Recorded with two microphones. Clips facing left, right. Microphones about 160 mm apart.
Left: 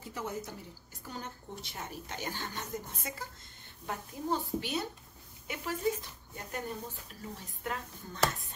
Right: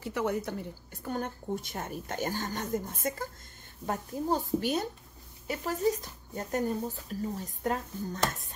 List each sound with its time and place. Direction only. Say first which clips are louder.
0.0 s a woman's voice: right 8 dB; 70° right (ahead or behind)
1.0 s a woman's voice: right 9 dB; 55° right (ahead or behind)